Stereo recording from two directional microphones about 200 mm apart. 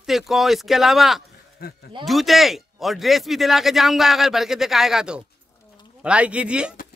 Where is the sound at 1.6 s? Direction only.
50° left (ahead or behind).